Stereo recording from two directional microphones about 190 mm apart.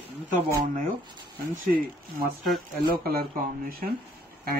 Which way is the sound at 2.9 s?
55° right (ahead or behind).